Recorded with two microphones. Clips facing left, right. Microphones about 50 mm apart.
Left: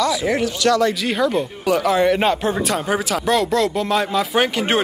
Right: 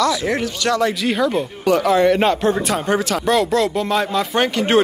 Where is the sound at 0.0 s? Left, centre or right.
Centre.